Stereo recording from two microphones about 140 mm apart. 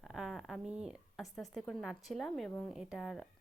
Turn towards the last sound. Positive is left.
turn(degrees=0)  # may be behind; listen again after turning